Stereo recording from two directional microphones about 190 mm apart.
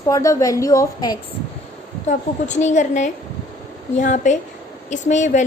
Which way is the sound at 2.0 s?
40° left (ahead or behind).